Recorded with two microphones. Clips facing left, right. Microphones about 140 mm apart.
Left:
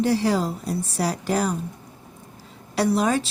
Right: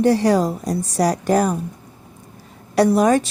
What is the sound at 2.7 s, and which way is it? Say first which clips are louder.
Speech: right 6 dB; 50° right (ahead or behind).